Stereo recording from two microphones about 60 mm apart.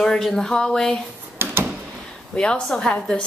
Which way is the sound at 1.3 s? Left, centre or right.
Right.